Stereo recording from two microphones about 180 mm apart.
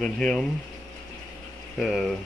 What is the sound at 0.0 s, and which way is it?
Speech, 5° left (ahead or behind).